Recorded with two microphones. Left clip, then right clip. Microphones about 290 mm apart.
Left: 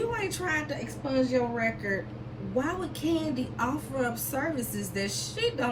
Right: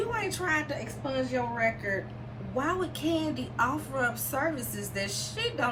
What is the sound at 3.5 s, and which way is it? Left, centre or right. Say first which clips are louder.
Speech: right 4 dB; centre.